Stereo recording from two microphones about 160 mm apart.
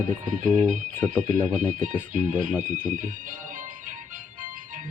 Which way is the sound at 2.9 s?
55° right (ahead or behind).